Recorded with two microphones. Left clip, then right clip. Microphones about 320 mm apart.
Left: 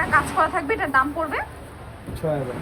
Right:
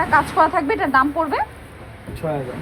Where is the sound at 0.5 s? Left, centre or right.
Right.